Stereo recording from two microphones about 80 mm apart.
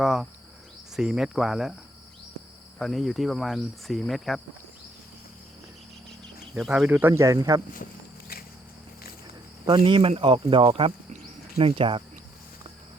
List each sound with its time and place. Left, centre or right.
0.0 s cricket: centre
2.7 s cricket: centre
6.5 s speech: centre
7.1 s speech: right
9.6 s speech: right
11.8 s speech: right